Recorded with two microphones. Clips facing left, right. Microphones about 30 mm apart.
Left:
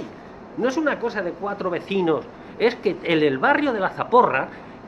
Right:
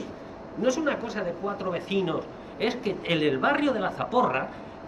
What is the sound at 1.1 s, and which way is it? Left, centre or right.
A woman's voice, left.